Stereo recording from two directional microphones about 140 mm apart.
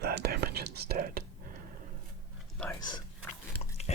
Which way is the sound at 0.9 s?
90° right.